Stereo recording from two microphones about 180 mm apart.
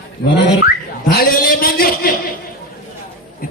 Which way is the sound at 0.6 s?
55° left (ahead or behind).